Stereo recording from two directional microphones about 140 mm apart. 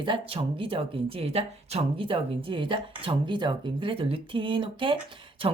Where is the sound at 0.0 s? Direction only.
40° right (ahead or behind).